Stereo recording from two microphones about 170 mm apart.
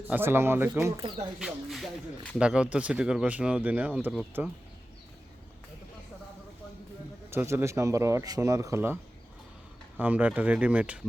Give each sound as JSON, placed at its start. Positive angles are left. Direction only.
{"t": 0.1, "sound": "speech", "side_deg": -15}
{"t": 1.4, "sound": "speech", "side_deg": 0}
{"t": 7.3, "sound": "speech", "side_deg": -15}
{"t": 10.0, "sound": "speech", "side_deg": -10}